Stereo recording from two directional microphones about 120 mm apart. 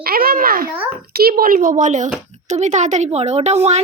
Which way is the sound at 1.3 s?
90° right.